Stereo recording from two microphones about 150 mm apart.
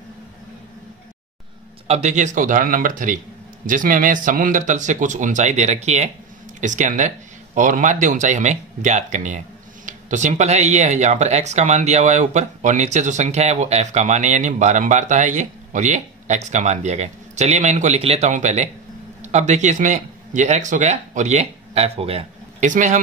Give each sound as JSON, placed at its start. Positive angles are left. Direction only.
{"t": 1.9, "sound": "speech", "side_deg": -50}
{"t": 22.7, "sound": "speech", "side_deg": -55}